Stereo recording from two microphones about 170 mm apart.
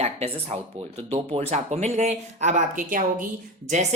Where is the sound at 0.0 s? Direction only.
40° right (ahead or behind).